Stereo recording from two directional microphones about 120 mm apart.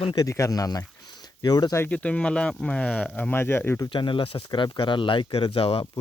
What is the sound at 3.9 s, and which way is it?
Speech, 45° left (ahead or behind).